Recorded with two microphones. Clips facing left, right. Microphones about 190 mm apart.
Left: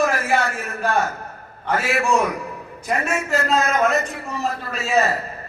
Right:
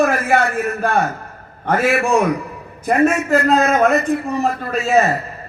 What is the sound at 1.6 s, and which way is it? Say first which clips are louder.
Speech: right 5 dB; 50° right (ahead or behind).